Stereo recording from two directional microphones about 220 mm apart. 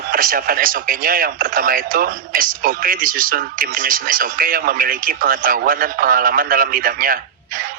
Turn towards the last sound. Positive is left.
turn(degrees=-40)  # may be behind; listen again after turning